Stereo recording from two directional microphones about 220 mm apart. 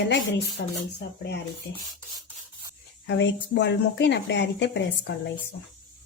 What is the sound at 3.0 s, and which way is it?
Speech, 55° left (ahead or behind).